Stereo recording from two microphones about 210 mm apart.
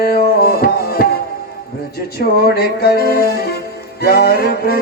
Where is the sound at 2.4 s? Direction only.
45° left (ahead or behind).